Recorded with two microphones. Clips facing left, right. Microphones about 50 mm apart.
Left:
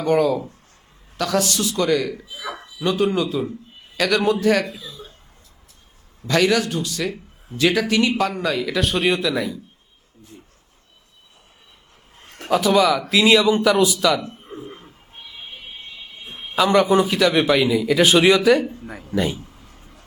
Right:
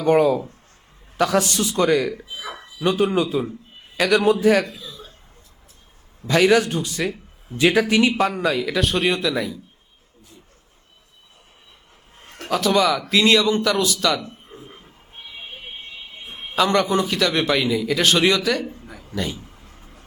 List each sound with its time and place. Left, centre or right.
0.0 s a man's voice: right
1.9 s a man's voice: centre
6.2 s speech: centre
6.6 s a man's voice: right
8.4 s speech: centre
12.4 s a man's voice: centre
16.6 s a man's voice: centre